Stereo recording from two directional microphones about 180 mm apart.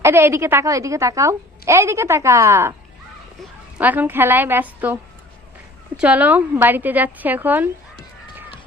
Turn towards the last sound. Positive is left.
turn(degrees=-10)  # may be behind; listen again after turning